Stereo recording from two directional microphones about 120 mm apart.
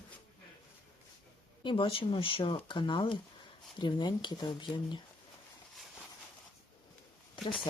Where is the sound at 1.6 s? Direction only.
45° left (ahead or behind).